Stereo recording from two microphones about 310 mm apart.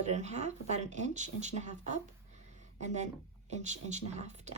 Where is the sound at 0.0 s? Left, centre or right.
Right.